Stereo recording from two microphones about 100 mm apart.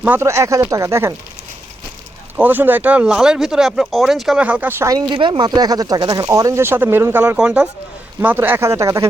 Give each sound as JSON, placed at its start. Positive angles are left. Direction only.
{"t": 0.2, "sound": "speech", "side_deg": -30}
{"t": 2.3, "sound": "speech", "side_deg": -20}
{"t": 4.4, "sound": "speech", "side_deg": -15}
{"t": 4.9, "sound": "speech", "side_deg": -50}
{"t": 7.3, "sound": "speech", "side_deg": -10}
{"t": 8.2, "sound": "speech", "side_deg": -20}